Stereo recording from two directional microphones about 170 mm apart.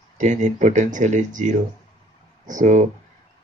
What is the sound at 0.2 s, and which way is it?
Speech, 45° right (ahead or behind).